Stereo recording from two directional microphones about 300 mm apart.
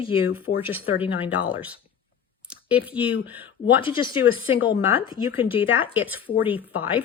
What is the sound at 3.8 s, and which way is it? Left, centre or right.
A woman's voice, centre.